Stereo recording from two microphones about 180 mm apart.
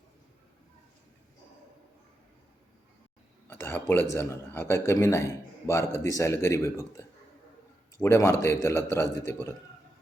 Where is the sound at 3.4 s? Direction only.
10° left (ahead or behind).